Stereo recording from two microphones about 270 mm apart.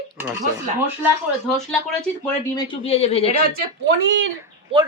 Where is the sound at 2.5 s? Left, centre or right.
Centre.